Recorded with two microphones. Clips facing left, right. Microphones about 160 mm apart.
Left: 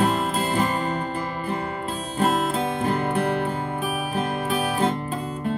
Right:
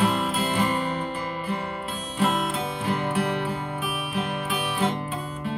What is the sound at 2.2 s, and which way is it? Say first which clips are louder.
Music: left 3 dB; 40° left (ahead or behind).